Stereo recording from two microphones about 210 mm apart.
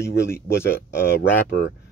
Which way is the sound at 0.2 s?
10° left (ahead or behind).